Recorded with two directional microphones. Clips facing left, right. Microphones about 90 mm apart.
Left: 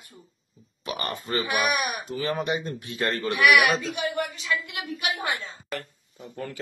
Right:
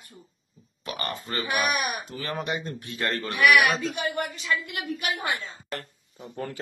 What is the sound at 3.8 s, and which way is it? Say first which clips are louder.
Speech: even; 45° right (ahead or behind).